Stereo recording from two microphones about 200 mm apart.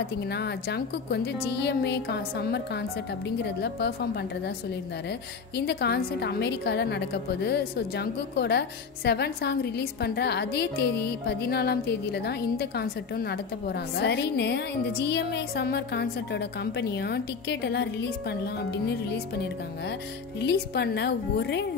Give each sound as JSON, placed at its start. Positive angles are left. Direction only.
{"t": 0.3, "sound": "a woman's voice", "side_deg": 55}
{"t": 5.7, "sound": "a woman's voice", "side_deg": 55}